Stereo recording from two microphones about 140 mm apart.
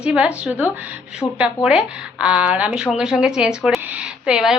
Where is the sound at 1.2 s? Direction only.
15° left (ahead or behind).